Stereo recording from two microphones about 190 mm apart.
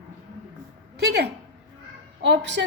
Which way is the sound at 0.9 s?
60° right (ahead or behind).